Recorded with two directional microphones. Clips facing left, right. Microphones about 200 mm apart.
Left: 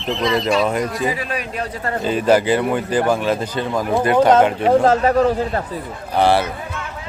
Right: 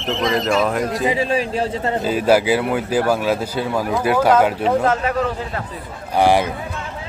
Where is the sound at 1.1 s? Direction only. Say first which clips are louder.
Right 6 dB; 25° right (ahead or behind).